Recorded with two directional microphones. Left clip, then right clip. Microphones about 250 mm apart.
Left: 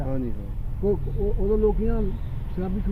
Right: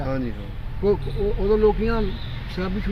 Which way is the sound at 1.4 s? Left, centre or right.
Right.